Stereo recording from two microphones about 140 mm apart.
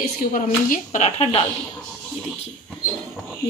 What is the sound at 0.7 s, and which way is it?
Speech, 55° left (ahead or behind).